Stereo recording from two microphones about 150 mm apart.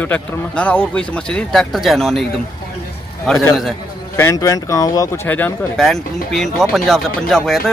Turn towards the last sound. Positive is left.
turn(degrees=5)  # may be behind; listen again after turning